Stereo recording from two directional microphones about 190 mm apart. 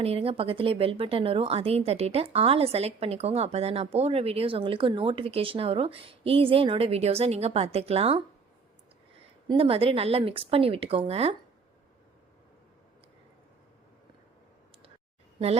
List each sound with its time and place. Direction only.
0.0 s a woman's voice: 30° right (ahead or behind)
9.5 s speech: 30° right (ahead or behind)